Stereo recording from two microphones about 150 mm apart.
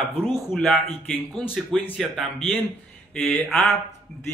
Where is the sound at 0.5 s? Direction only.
5° left (ahead or behind).